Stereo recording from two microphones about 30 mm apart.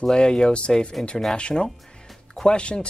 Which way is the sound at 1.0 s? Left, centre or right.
Left.